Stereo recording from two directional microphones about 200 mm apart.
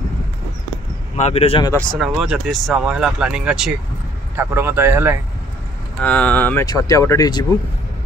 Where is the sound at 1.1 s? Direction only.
35° left (ahead or behind).